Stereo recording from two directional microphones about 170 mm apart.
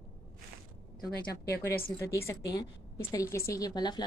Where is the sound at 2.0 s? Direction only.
15° left (ahead or behind).